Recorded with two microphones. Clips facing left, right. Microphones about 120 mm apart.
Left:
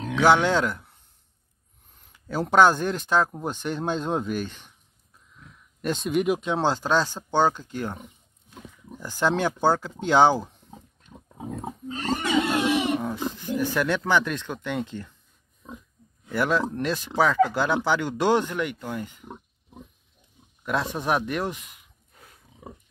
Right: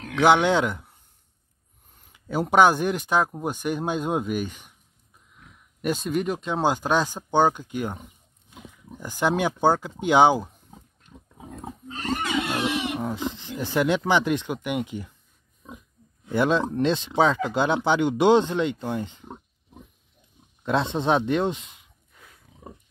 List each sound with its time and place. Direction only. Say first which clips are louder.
0.2 s speech: right 1 dB; 15° right (ahead or behind)
2.1 s speech: even; 15° right (ahead or behind)
5.3 s a sound: left 2 dB; 15° right (ahead or behind)
5.9 s speech: left 2 dB; centre (ahead or behind)
6.6 s speech: right 4 dB; 15° right (ahead or behind)
11.6 s pig: even; 30° left (ahead or behind)
13.0 s speech: even; 20° right (ahead or behind)
16.3 s speech: right 2 dB; 25° right (ahead or behind)
20.6 s speech: right 3 dB; 25° right (ahead or behind)